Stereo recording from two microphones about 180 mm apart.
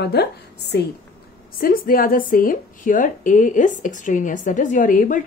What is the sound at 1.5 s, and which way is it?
Speech, 55° left (ahead or behind).